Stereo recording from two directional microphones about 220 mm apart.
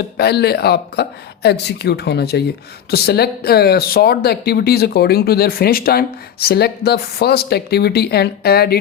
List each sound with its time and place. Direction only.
0.2 s speech: 45° left (ahead or behind)